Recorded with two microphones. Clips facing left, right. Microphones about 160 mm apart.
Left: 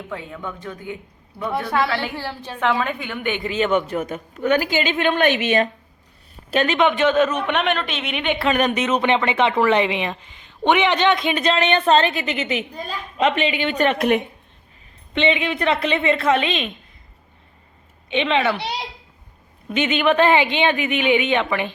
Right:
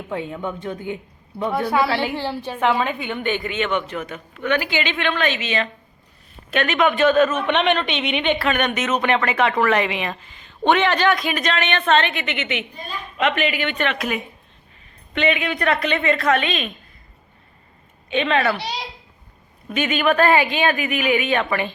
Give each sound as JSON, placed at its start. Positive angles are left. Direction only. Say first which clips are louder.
{"t": 0.1, "sound": "a woman's voice", "louder": "right 7 dB", "side_deg": -25}
{"t": 3.4, "sound": "a woman's voice", "louder": "left 3 dB", "side_deg": 35}
{"t": 6.5, "sound": "speech", "louder": "left 1 dB", "side_deg": 30}
{"t": 7.5, "sound": "a woman's voice", "louder": "right 2 dB", "side_deg": 5}
{"t": 8.4, "sound": "speech", "louder": "left 2 dB", "side_deg": 30}
{"t": 13.7, "sound": "a woman's voice", "louder": "left 6 dB", "side_deg": 45}
{"t": 15.1, "sound": "speech", "louder": "left 1 dB", "side_deg": 25}
{"t": 18.1, "sound": "speech", "louder": "even", "side_deg": 20}
{"t": 19.7, "sound": "speech", "louder": "left 1 dB", "side_deg": 25}